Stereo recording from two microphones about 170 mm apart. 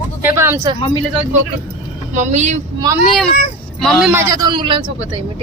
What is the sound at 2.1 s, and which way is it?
Speech, 45° right (ahead or behind).